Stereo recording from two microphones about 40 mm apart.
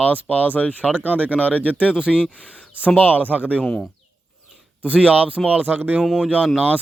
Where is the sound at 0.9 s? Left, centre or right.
Right.